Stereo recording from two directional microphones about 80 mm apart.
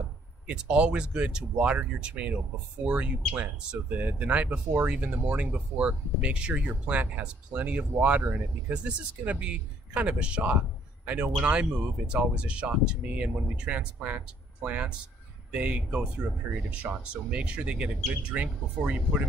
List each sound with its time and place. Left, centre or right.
0.5 s speech: centre